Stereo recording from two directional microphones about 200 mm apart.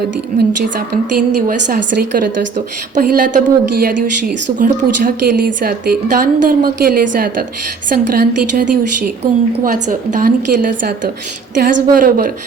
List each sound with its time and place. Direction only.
0.3 s speech: 50° right (ahead or behind)